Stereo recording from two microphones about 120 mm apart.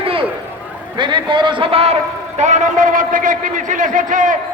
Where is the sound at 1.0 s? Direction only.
40° right (ahead or behind).